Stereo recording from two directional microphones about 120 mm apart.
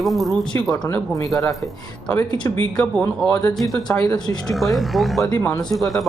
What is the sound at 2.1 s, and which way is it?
Speech, 35° left (ahead or behind).